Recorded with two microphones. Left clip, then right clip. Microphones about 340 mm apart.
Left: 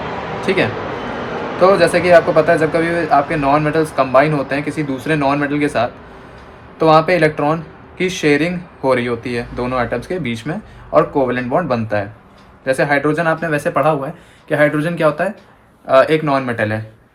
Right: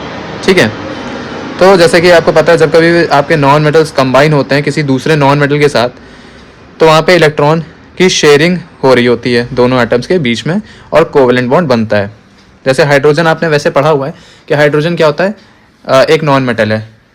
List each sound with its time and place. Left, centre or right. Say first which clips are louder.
0.4 s speech: right 9 dB; right
1.9 s a man's voice: right 6 dB; right